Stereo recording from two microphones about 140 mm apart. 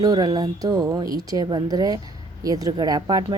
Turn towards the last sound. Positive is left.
turn(degrees=-30)  # may be behind; listen again after turning